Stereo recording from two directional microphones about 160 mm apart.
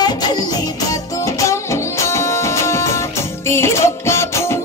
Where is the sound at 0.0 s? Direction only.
25° left (ahead or behind).